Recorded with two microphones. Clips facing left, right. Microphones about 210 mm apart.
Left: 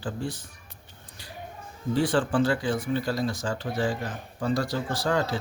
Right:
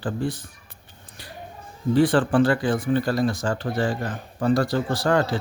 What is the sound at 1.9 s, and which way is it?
Speech, 55° right (ahead or behind).